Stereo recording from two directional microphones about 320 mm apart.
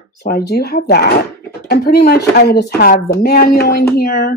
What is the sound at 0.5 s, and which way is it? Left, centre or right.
Speech, left.